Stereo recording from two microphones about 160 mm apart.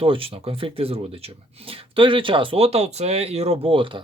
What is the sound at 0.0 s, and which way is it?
Speech, 35° right (ahead or behind).